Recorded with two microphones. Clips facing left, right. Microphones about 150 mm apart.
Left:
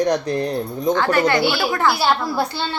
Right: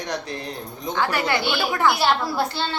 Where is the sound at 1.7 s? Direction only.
15° right (ahead or behind).